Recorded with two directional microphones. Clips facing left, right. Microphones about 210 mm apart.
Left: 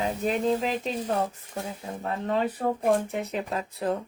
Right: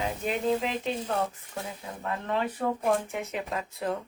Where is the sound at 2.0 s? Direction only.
35° left (ahead or behind).